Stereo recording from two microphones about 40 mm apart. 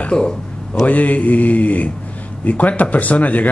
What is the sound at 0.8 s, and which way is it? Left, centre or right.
Speech, left.